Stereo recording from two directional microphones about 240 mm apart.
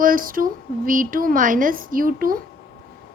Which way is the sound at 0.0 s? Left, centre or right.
Right.